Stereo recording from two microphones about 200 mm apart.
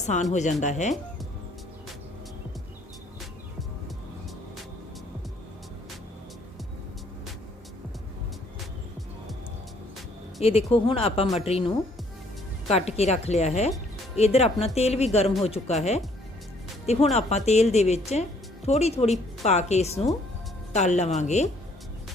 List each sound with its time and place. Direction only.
0.0 s speech: 35° left (ahead or behind)
10.4 s speech: 30° left (ahead or behind)